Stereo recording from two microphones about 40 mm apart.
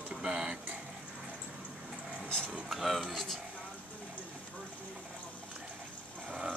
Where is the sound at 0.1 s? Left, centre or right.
Centre.